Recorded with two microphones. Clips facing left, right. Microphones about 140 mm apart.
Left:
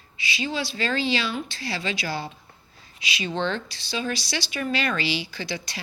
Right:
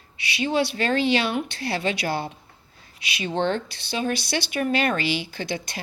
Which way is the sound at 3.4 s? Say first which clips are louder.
Right 5 dB; 50° right (ahead or behind).